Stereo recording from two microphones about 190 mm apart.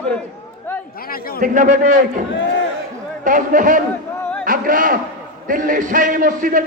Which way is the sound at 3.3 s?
45° right (ahead or behind).